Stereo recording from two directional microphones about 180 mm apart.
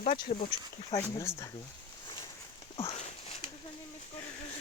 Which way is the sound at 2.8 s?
35° left (ahead or behind).